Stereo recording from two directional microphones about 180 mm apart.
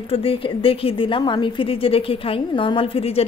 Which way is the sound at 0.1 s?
30° left (ahead or behind).